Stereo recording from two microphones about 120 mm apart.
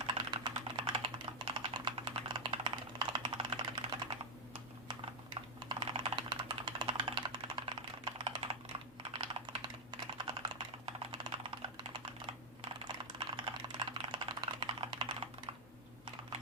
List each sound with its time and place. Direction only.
0.0 s typing: 40° right (ahead or behind)
9.1 s computer keyboard: 45° right (ahead or behind)
10.2 s typing: 40° right (ahead or behind)